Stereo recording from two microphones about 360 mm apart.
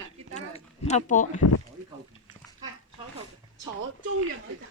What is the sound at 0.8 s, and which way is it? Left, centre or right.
Speech, centre.